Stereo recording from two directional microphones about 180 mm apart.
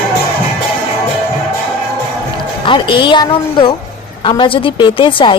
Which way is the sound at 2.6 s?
25° left (ahead or behind).